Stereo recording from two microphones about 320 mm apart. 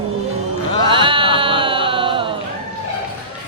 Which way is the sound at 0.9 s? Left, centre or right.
Centre.